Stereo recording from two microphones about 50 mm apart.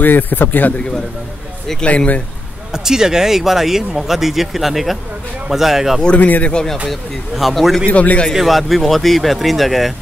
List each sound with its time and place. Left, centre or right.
0.0 s speech: left
1.8 s speech: left
2.7 s speech: centre
6.1 s speech: left
6.5 s speech: centre
6.9 s speech: centre
7.9 s speech: left
8.3 s speech: centre